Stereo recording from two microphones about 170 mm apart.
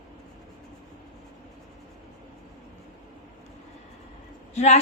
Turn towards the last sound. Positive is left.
turn(degrees=40)  # may be behind; listen again after turning